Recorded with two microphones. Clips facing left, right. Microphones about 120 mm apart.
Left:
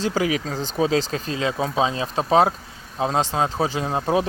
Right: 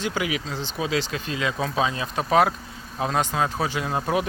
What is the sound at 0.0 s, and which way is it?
Speech, 35° left (ahead or behind).